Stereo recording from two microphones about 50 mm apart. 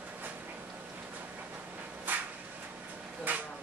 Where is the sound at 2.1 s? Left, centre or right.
Right.